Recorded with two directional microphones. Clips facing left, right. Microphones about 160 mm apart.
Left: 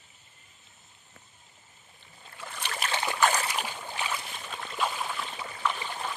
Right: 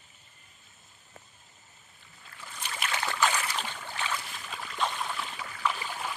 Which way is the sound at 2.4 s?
65° left (ahead or behind).